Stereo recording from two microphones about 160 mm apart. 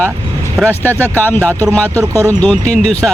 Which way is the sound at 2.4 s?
5° left (ahead or behind).